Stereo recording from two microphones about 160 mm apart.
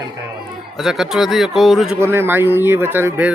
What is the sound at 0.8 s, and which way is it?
Speech, centre (ahead or behind).